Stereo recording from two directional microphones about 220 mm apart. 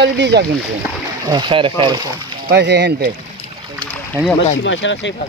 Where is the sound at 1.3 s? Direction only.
20° right (ahead or behind).